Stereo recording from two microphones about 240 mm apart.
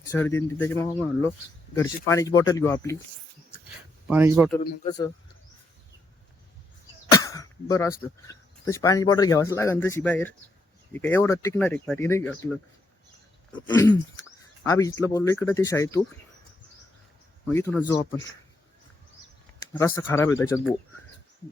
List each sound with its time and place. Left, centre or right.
0.1 s speech: centre
4.1 s speech: centre
4.9 s speech: centre
7.1 s throat clearing: centre
8.3 s speech: centre
13.5 s speech: centre
17.5 s speech: centre
19.7 s speech: centre